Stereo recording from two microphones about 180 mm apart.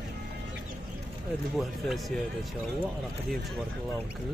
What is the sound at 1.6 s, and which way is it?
Speech, centre (ahead or behind).